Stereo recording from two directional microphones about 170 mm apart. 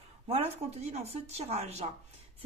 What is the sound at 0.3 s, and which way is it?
Speech, 35° right (ahead or behind).